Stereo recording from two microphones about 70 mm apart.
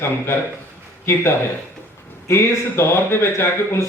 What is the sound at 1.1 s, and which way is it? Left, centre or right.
Speech, left.